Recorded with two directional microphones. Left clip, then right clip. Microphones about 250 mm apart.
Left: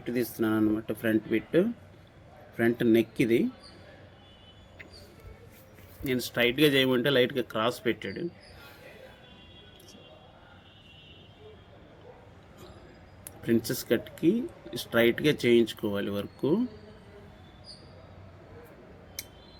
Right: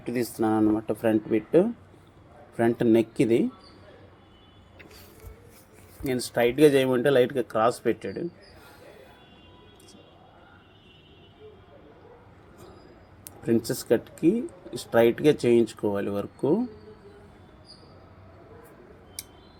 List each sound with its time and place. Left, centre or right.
0.0 s speech: centre
6.1 s speech: centre
13.4 s speech: centre